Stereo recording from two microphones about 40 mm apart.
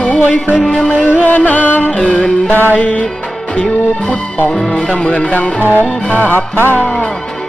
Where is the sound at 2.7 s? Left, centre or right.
Left.